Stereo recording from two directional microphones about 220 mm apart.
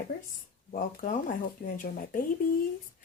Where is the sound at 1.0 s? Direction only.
40° left (ahead or behind).